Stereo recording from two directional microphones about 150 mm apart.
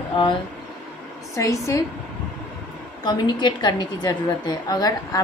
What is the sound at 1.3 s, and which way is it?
Speech, 20° left (ahead or behind).